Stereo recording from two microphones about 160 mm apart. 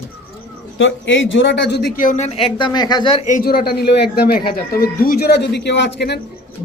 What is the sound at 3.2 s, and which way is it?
A man's voice, 60° left (ahead or behind).